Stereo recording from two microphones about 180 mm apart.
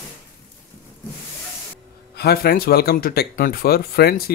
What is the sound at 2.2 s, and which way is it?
Speech, 60° left (ahead or behind).